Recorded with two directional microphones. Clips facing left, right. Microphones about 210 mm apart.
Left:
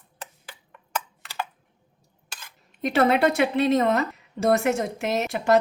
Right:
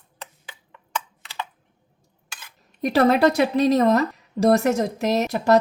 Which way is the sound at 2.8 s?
40° right (ahead or behind).